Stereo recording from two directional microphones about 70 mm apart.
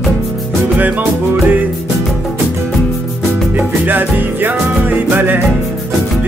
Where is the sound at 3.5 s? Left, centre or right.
Right.